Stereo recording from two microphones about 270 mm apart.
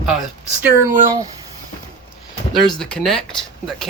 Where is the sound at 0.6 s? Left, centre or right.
Centre.